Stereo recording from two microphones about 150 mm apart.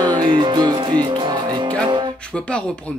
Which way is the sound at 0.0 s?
30° right (ahead or behind).